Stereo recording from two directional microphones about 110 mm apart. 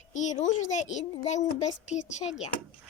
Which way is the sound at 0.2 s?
90° left.